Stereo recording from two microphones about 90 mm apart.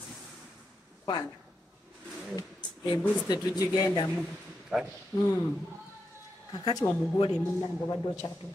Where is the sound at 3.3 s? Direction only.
40° left (ahead or behind).